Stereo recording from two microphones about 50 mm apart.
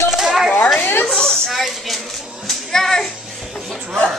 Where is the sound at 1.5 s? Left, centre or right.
Centre.